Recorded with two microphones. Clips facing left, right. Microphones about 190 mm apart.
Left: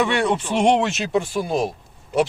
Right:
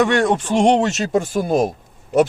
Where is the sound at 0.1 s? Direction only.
45° right (ahead or behind).